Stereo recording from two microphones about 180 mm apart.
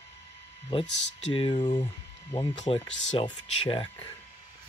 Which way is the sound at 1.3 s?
25° left (ahead or behind).